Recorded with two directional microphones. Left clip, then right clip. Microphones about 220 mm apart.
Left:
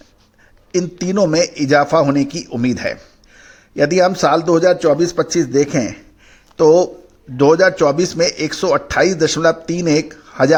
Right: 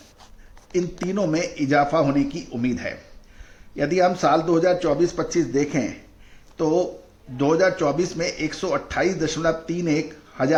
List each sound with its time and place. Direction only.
0.7 s a man's voice: 45° left (ahead or behind)